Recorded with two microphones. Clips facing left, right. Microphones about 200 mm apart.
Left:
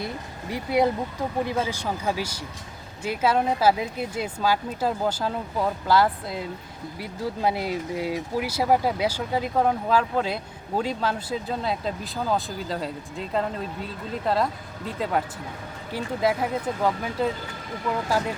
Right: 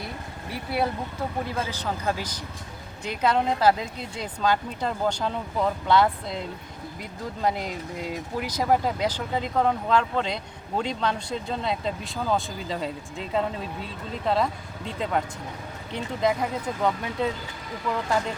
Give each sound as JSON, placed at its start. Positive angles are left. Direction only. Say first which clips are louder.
{"t": 0.5, "sound": "speech", "louder": "left 5 dB", "side_deg": 15}